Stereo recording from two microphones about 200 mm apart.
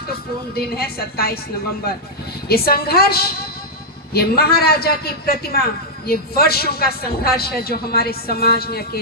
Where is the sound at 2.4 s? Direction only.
50° left (ahead or behind).